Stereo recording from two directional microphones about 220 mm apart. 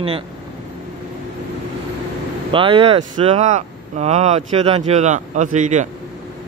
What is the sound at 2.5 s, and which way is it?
Speech, 25° right (ahead or behind).